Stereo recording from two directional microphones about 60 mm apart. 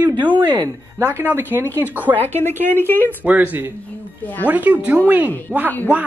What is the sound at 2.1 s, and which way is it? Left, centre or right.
Speech, left.